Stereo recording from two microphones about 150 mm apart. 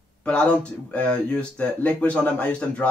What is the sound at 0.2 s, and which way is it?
A man's voice, 5° left (ahead or behind).